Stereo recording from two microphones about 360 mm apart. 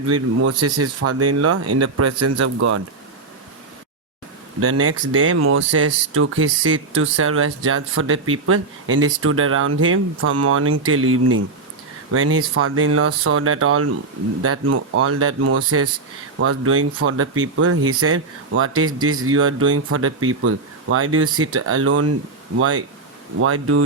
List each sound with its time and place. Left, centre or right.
0.1 s speech: right
4.6 s speech: right